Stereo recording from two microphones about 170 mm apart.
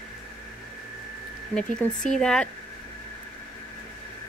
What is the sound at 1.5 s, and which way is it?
Speech, 5° left (ahead or behind).